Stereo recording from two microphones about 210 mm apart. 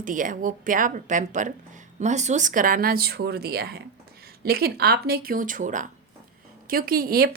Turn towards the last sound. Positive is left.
turn(degrees=-45)  # may be behind; listen again after turning